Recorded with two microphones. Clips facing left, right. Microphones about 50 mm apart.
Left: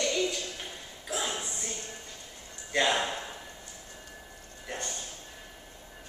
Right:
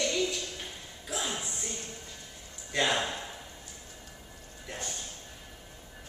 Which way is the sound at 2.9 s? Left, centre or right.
Centre.